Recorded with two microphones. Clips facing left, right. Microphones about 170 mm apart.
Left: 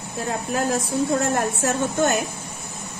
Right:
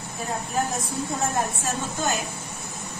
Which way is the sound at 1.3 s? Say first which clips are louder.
Left 5 dB; 70° left (ahead or behind).